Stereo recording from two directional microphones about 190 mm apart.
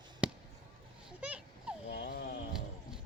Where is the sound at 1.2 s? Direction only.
5° right (ahead or behind).